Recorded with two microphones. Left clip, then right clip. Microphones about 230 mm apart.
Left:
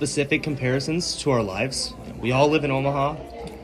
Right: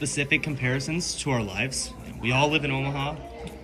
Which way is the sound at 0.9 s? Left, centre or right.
Right.